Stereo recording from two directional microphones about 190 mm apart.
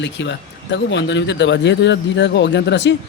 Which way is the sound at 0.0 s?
70° left (ahead or behind).